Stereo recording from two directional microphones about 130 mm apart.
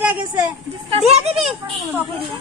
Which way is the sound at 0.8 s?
55° right (ahead or behind).